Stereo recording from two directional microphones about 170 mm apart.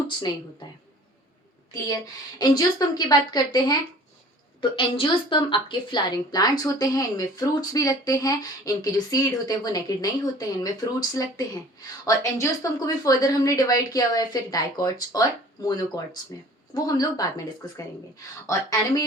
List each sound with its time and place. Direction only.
2.4 s a woman's voice: 25° left (ahead or behind)